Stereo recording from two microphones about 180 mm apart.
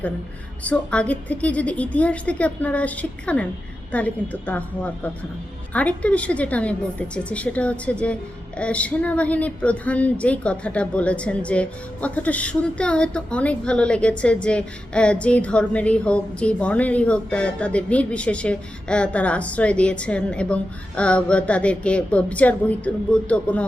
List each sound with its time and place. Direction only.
0.6 s a woman's voice: 5° left (ahead or behind)